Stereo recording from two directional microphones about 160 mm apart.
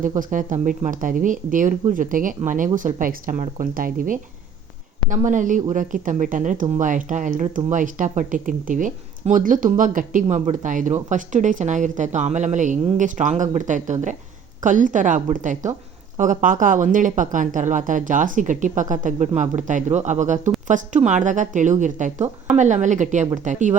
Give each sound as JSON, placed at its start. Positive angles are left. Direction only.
{"t": 0.2, "sound": "speech", "side_deg": -55}